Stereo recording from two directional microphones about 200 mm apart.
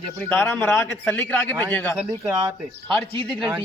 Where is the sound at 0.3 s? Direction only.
10° left (ahead or behind).